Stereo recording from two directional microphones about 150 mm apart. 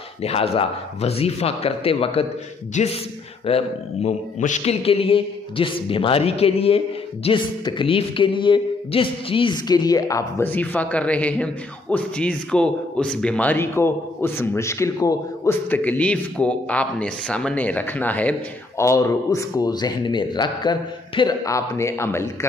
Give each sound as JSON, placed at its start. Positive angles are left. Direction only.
{"t": 0.2, "sound": "a man's voice", "side_deg": 40}